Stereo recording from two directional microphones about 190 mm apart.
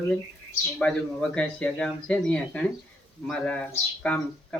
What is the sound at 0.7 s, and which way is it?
Speech, 5° left (ahead or behind).